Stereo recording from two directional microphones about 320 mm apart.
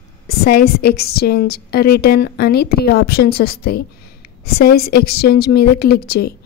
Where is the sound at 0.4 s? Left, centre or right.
Left.